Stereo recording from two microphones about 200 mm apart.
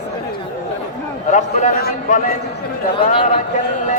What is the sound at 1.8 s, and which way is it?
Speech, 50° left (ahead or behind).